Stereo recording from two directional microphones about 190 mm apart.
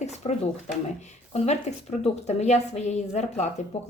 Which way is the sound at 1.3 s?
35° left (ahead or behind).